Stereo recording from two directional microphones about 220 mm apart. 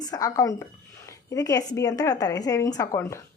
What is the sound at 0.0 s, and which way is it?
Speech, 15° left (ahead or behind).